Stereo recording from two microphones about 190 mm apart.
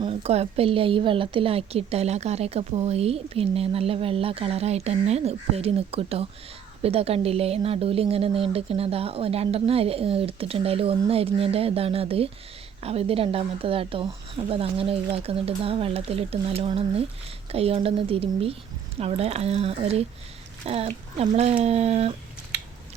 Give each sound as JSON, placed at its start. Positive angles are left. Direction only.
{"t": 0.0, "sound": "a woman's voice", "side_deg": -30}